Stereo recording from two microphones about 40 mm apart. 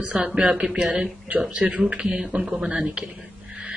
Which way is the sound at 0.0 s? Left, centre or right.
Right.